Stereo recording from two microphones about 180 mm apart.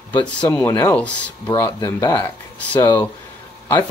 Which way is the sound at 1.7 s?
20° left (ahead or behind).